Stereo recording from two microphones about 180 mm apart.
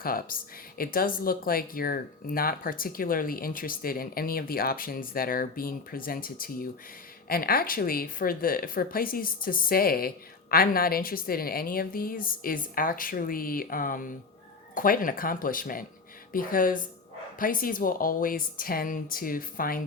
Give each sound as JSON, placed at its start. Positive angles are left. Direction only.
{"t": 0.0, "sound": "speech", "side_deg": 55}